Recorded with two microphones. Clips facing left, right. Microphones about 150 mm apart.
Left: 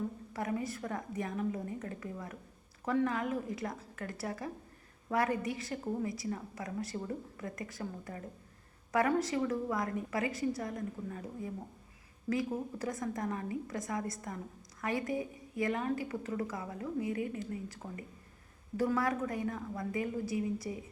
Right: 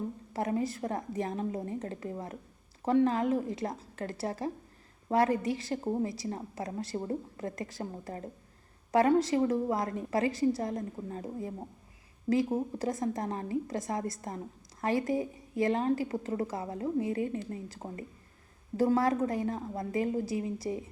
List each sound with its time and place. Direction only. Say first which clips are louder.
0.3 s a woman's voice: right 5 dB; 30° right (ahead or behind)